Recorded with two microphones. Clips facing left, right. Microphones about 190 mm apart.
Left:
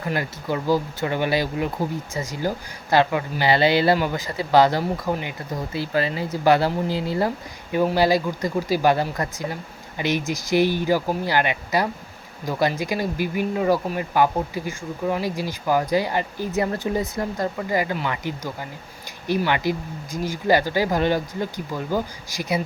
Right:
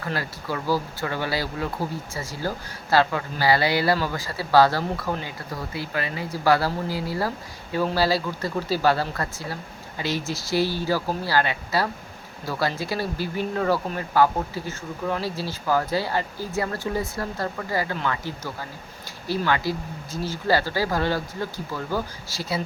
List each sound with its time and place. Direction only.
0.0 s speech: 20° left (ahead or behind)